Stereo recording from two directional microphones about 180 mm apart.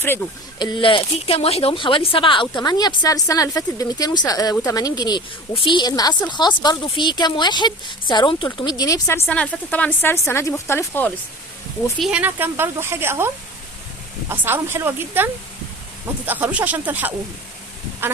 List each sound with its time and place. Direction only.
0.6 s speech: 25° left (ahead or behind)
11.9 s speech: 5° right (ahead or behind)
18.0 s a sound: 10° right (ahead or behind)